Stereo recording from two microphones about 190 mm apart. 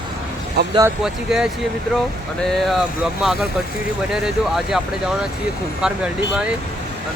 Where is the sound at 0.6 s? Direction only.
55° right (ahead or behind).